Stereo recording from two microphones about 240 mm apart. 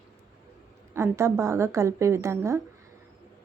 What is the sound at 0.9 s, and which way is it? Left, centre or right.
Speech, centre.